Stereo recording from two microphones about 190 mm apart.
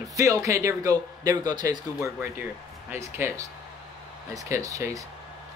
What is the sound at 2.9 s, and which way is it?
Speech, 15° right (ahead or behind).